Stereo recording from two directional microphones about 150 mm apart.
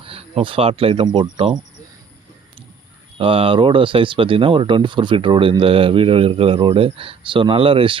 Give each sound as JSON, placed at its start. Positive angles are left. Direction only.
{"t": 0.0, "sound": "speech", "side_deg": -40}
{"t": 3.2, "sound": "speech", "side_deg": -35}